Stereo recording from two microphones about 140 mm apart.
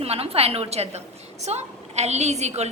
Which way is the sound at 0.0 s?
45° right (ahead or behind).